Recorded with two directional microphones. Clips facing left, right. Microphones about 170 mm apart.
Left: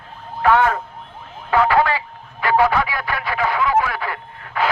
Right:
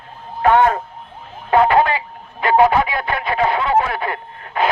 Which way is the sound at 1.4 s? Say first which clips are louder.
Right 3 dB; 25° right (ahead or behind).